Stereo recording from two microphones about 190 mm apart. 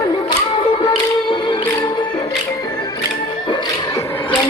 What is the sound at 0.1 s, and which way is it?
Music, 25° left (ahead or behind).